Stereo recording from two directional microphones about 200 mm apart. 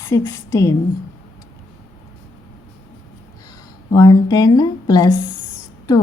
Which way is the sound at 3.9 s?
20° left (ahead or behind).